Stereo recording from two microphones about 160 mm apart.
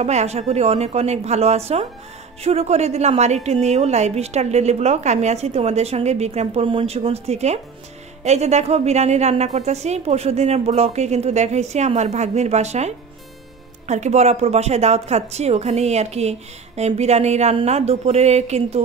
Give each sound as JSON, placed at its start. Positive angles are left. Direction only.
{"t": 0.0, "sound": "a woman's voice", "side_deg": -45}